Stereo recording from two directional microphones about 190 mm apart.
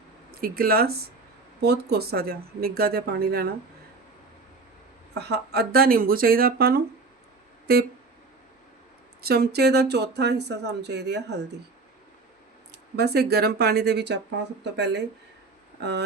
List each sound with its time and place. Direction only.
0.4 s speech: 50° right (ahead or behind)
5.1 s speech: 60° right (ahead or behind)
9.2 s speech: 55° right (ahead or behind)
13.0 s speech: 60° right (ahead or behind)